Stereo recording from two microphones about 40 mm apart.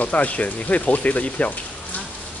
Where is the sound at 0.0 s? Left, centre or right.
Left.